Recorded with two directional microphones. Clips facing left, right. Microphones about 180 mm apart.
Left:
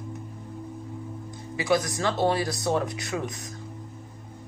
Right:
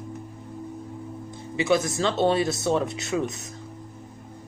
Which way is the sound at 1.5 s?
25° right (ahead or behind).